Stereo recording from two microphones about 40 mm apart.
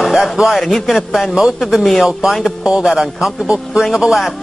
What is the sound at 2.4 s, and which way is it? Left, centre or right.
Speech, centre.